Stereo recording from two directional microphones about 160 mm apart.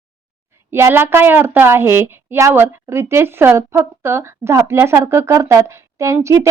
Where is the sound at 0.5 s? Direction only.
15° right (ahead or behind).